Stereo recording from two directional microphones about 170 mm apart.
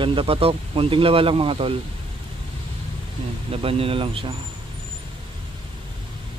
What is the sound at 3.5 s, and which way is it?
Speech, 35° right (ahead or behind).